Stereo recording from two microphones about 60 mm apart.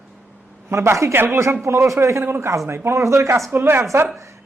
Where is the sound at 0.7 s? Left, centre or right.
Right.